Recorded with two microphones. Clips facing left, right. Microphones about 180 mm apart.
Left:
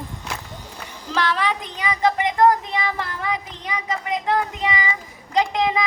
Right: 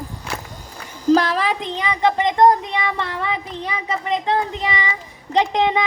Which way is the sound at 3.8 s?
30° right (ahead or behind).